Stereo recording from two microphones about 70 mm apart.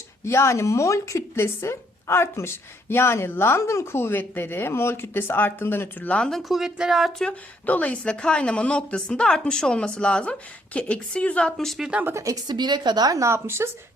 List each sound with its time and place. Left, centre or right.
0.3 s speech: left; by 6.4 s centre
6.5 s speech: centre
7.7 s a woman's voice: left
11.5 s speech: centre
12.1 s a woman's voice: right
12.5 s a woman's voice: right
13.1 s speech: right